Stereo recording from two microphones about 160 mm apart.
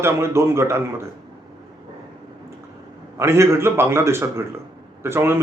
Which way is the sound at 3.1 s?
15° right (ahead or behind).